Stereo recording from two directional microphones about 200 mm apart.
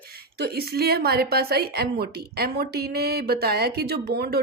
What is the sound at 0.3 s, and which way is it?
A woman's voice, 50° right (ahead or behind).